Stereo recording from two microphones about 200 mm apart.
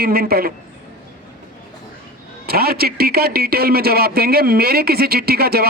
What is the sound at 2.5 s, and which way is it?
A man's voice, 50° right (ahead or behind).